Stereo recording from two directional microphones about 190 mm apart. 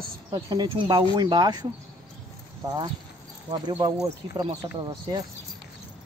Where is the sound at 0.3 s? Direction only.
25° right (ahead or behind).